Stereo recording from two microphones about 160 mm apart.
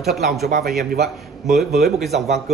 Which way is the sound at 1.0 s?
Centre (ahead or behind).